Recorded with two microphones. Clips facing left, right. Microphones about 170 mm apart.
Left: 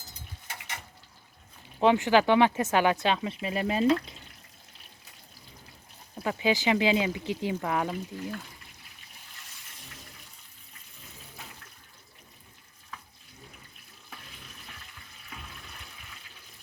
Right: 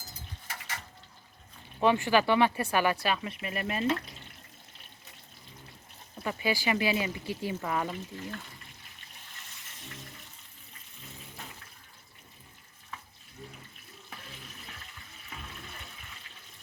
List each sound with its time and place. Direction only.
0.4 s a sound: 20° left (ahead or behind)
1.8 s speech: 20° left (ahead or behind)
6.2 s speech: 20° left (ahead or behind); by 8.4 s centre (ahead or behind)
15.3 s toilet flush: 5° right (ahead or behind)